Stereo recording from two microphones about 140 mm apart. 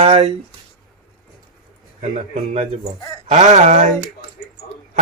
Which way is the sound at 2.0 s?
65° right (ahead or behind).